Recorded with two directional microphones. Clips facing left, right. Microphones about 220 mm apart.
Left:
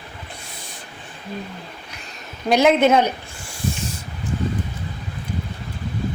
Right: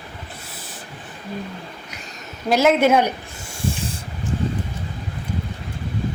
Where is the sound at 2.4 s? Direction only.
5° right (ahead or behind).